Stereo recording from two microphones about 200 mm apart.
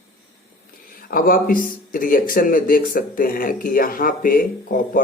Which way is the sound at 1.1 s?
45° left (ahead or behind).